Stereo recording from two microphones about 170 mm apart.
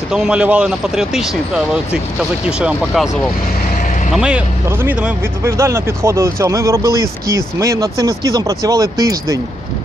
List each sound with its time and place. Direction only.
0.1 s speech: 5° right (ahead or behind)
2.4 s speech: 5° right (ahead or behind); by 9.4 s 20° right (ahead or behind)